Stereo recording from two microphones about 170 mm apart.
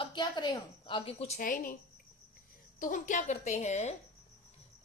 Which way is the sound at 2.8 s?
50° left (ahead or behind).